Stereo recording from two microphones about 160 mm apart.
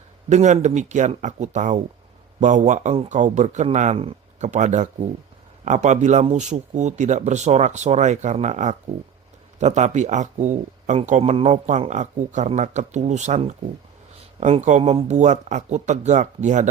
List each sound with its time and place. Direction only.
0.3 s speech: 50° right (ahead or behind)